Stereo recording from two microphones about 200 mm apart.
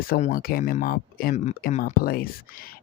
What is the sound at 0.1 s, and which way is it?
Speech, 45° left (ahead or behind).